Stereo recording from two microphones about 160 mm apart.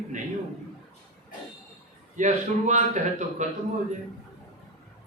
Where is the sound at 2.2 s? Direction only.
50° right (ahead or behind).